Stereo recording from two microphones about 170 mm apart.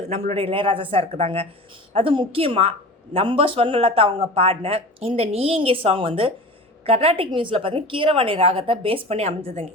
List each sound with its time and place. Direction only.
0.1 s speech: 35° right (ahead or behind)